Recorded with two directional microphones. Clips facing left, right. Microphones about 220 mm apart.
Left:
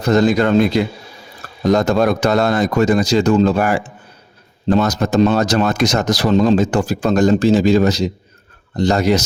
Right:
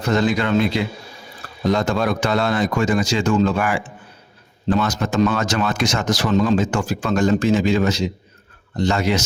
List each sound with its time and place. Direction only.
0.0 s speech: 40° left (ahead or behind)